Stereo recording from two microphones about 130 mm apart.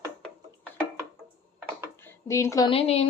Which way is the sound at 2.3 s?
25° left (ahead or behind).